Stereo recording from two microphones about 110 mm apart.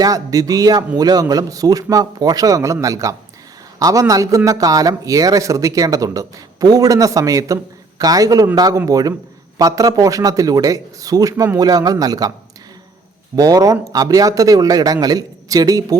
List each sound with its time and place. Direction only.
0.0 s a man's voice: 35° right (ahead or behind)
13.3 s speech: 35° right (ahead or behind)